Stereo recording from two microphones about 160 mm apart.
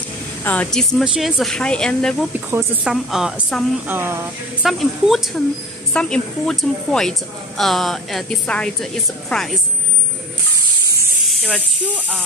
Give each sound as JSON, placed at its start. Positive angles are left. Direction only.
{"t": 0.4, "sound": "a woman's voice", "side_deg": 10}
{"t": 3.8, "sound": "speech", "side_deg": -15}
{"t": 4.6, "sound": "a woman's voice", "side_deg": 0}
{"t": 11.2, "sound": "speech", "side_deg": 10}